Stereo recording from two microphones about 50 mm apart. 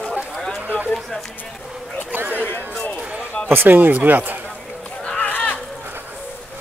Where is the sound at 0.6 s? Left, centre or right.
Right.